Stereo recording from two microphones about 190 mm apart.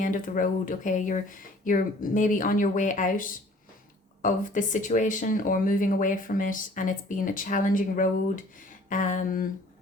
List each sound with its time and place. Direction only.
0.0 s speech: 45° left (ahead or behind)